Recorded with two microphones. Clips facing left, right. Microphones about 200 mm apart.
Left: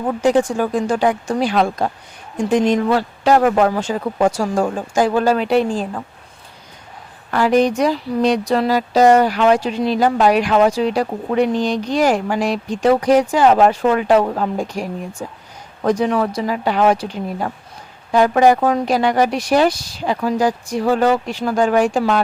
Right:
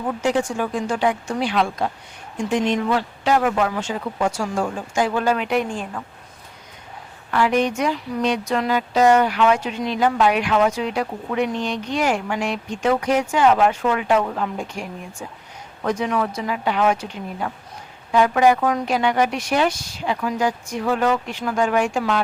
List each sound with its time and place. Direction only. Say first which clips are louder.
0.2 s speech: left 7 dB; 35° left (ahead or behind)
7.3 s speech: left 5 dB; 40° left (ahead or behind)